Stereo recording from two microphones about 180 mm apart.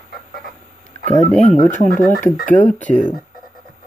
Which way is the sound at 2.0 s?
50° left (ahead or behind).